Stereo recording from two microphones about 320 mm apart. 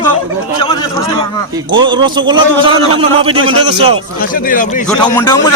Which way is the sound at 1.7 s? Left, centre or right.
Centre.